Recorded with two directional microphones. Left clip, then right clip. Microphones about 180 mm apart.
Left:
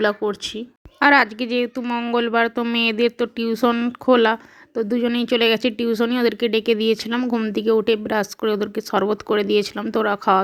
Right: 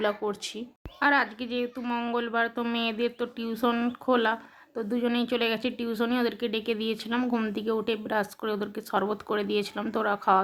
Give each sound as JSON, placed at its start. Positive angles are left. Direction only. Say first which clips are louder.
{"t": 0.0, "sound": "speech", "louder": "left 8 dB", "side_deg": 25}
{"t": 0.9, "sound": "speech", "louder": "left 9 dB", "side_deg": 35}
{"t": 1.8, "sound": "speech", "louder": "left 8 dB", "side_deg": 20}
{"t": 7.2, "sound": "speech", "louder": "left 7 dB", "side_deg": 15}